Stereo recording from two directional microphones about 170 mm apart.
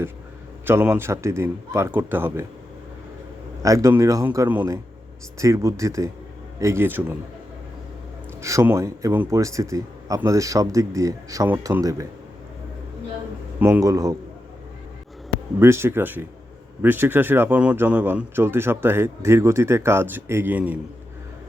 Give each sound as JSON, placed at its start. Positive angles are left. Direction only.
{"t": 0.6, "sound": "speech", "side_deg": -15}
{"t": 3.6, "sound": "speech", "side_deg": -20}
{"t": 8.4, "sound": "speech", "side_deg": -15}
{"t": 13.6, "sound": "speech", "side_deg": -15}
{"t": 15.5, "sound": "speech", "side_deg": -15}